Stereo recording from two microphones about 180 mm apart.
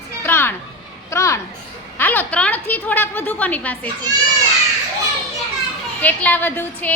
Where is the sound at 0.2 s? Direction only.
10° left (ahead or behind).